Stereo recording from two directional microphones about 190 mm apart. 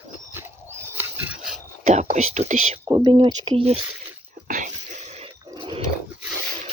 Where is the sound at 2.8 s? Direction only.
20° right (ahead or behind).